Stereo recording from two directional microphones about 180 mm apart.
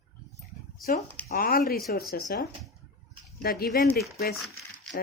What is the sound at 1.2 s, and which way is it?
A woman's voice, 55° left (ahead or behind).